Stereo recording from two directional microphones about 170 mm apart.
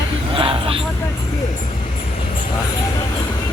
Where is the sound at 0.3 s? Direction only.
30° right (ahead or behind).